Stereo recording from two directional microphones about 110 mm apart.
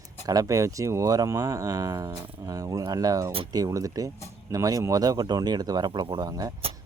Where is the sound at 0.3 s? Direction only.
30° right (ahead or behind).